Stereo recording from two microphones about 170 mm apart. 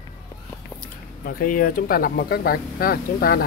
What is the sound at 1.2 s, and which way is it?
Speech, 55° left (ahead or behind).